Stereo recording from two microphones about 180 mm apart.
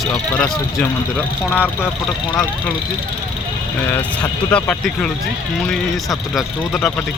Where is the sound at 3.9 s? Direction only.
5° left (ahead or behind).